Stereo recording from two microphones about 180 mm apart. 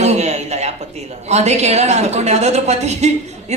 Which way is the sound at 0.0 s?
40° right (ahead or behind).